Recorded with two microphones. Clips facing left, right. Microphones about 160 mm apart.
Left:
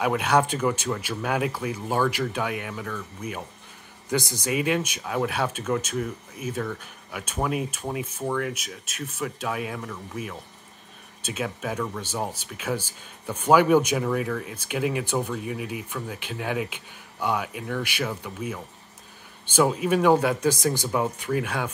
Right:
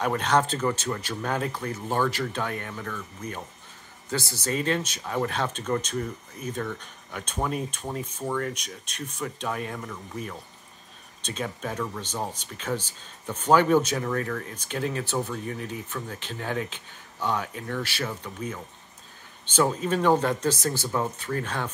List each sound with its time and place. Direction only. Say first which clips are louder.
0.0 s speech: left 2 dB; 10° left (ahead or behind)